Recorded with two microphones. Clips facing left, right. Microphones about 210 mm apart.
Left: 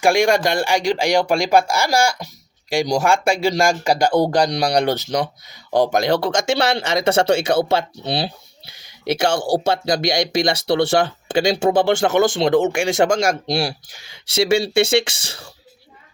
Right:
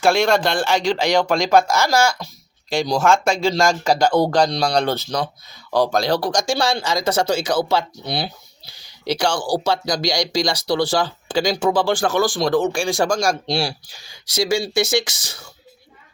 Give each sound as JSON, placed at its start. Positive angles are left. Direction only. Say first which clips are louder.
{"t": 0.0, "sound": "speech", "louder": "left 1 dB", "side_deg": 15}
{"t": 6.5, "sound": "speech", "louder": "left 3 dB", "side_deg": 65}
{"t": 7.0, "sound": "speech", "louder": "left 5 dB", "side_deg": 25}
{"t": 13.5, "sound": "speech", "louder": "left 1 dB", "side_deg": 55}
{"t": 14.1, "sound": "speech", "louder": "left 3 dB", "side_deg": 25}